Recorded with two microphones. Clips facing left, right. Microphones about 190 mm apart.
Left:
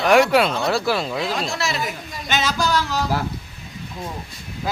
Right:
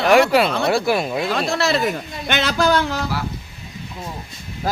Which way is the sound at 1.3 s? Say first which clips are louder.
Right 5 dB; 60° right (ahead or behind).